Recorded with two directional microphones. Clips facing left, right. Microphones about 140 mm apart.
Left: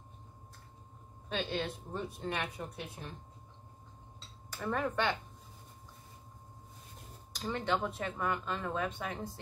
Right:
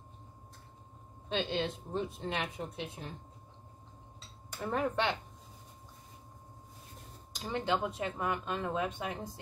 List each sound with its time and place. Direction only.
1.3 s speech: 25° right (ahead or behind)
4.5 s speech: 20° right (ahead or behind)
7.3 s speech: 20° right (ahead or behind)